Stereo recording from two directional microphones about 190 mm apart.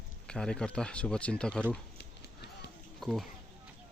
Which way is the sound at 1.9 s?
60° left (ahead or behind).